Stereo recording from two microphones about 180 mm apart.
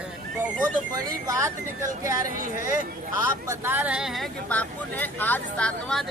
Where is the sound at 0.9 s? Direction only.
20° right (ahead or behind).